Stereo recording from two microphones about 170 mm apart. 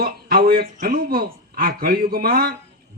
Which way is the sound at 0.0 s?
60° right (ahead or behind).